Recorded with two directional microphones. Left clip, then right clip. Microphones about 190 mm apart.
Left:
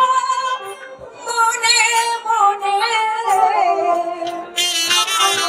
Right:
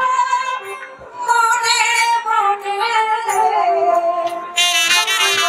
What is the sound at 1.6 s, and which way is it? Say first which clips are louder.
Music: left 1 dB; 25° left (ahead or behind).